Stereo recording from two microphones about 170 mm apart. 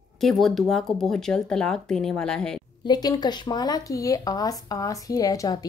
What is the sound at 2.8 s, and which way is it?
Speech, 25° left (ahead or behind).